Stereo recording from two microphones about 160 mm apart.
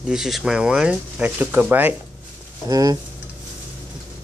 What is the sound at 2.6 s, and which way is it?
Speech, 25° right (ahead or behind).